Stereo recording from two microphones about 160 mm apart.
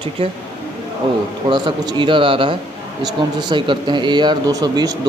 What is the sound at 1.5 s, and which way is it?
Speech, 30° right (ahead or behind).